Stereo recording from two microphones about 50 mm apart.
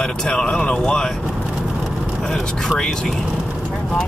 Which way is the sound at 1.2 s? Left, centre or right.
Centre.